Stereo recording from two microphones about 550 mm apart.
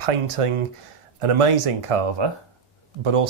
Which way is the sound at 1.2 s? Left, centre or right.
Right.